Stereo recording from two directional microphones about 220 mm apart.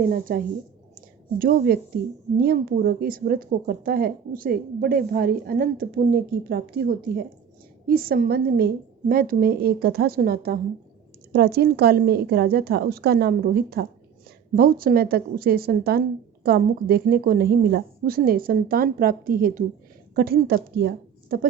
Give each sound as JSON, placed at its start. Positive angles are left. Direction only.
{"t": 0.1, "sound": "a woman's voice", "side_deg": -40}